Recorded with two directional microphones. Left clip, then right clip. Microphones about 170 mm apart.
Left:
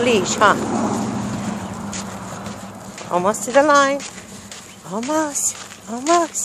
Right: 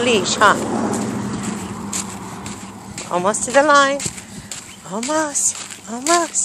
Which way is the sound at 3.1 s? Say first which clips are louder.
Even; 5° left (ahead or behind).